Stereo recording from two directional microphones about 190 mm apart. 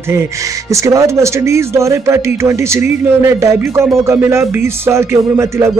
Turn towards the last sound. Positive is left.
turn(degrees=-15)  # may be behind; listen again after turning